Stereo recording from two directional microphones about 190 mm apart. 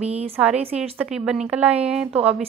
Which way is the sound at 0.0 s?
35° right (ahead or behind).